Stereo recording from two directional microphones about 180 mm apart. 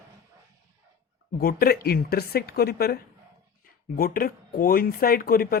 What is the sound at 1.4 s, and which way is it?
Speech, 55° left (ahead or behind).